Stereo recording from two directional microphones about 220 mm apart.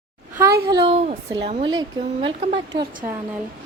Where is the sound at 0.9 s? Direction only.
30° right (ahead or behind).